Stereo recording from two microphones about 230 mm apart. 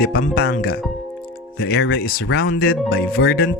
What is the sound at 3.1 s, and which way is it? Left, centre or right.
Speech, left.